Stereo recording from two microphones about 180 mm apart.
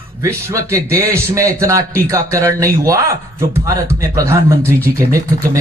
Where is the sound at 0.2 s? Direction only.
15° right (ahead or behind).